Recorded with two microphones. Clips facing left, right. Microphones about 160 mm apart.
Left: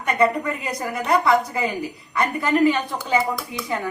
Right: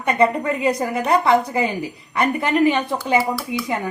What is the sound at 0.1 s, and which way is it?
A woman's voice, 25° right (ahead or behind).